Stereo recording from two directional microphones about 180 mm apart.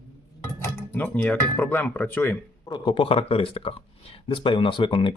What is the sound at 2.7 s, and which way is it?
Speech, 25° left (ahead or behind).